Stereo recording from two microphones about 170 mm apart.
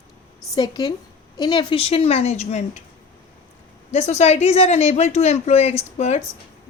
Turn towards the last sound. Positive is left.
turn(degrees=40)  # may be behind; listen again after turning